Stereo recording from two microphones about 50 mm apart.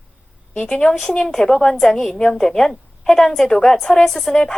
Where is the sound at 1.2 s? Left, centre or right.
Centre.